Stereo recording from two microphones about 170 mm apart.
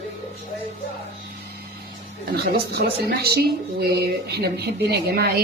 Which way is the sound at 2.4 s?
65° right (ahead or behind).